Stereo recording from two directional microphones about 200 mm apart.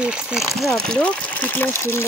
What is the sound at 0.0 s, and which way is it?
Speech, 5° right (ahead or behind).